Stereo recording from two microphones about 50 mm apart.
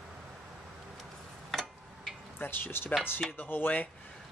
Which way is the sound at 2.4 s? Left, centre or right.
Left.